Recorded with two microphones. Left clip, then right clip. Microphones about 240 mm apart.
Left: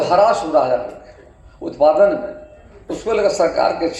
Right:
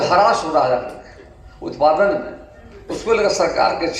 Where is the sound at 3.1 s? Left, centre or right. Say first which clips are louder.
Even; left.